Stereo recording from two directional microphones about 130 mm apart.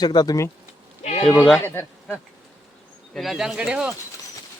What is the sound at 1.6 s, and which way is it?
Speech, 15° left (ahead or behind).